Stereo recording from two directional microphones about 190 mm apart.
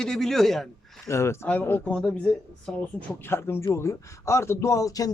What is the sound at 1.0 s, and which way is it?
A man's voice, 15° left (ahead or behind).